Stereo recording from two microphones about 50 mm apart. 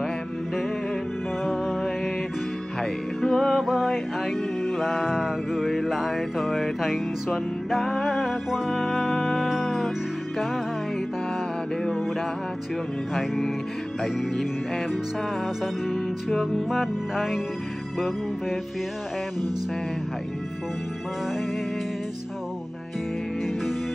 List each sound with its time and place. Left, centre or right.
1.4 s music: centre
13.1 s music: centre